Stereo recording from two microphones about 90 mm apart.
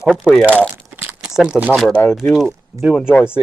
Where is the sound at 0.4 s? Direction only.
15° right (ahead or behind).